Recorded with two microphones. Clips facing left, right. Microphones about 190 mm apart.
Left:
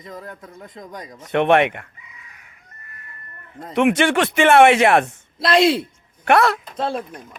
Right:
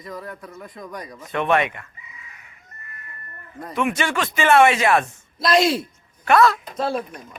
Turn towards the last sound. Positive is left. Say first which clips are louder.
# even
turn(degrees=30)  # may be behind; listen again after turning